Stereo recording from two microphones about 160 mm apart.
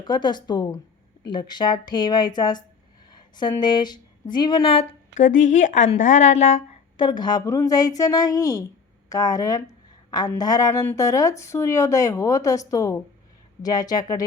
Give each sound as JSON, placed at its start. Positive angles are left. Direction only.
{"t": 0.0, "sound": "speech", "side_deg": 25}
{"t": 5.1, "sound": "a woman's voice", "side_deg": 50}
{"t": 6.9, "sound": "speech", "side_deg": 30}